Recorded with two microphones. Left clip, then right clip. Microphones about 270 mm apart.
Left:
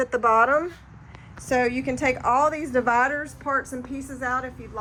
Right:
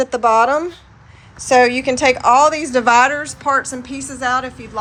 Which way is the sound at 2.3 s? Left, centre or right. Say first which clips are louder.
Right 9 dB; right.